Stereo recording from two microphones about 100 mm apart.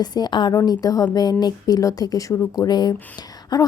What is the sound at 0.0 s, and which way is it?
A woman's voice, 45° left (ahead or behind).